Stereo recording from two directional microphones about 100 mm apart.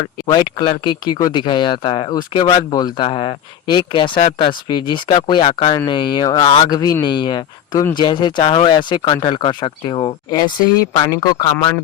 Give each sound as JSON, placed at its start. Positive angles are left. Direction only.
{"t": 0.0, "sound": "speech", "side_deg": 45}
{"t": 3.0, "sound": "speech", "side_deg": 65}
{"t": 5.9, "sound": "speech", "side_deg": 50}